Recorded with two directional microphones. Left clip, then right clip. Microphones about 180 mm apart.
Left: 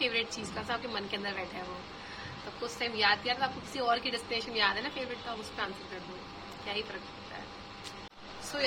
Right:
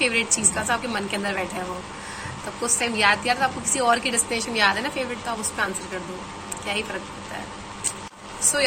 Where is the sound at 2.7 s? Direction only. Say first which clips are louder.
Right 8 dB; 15° left (ahead or behind).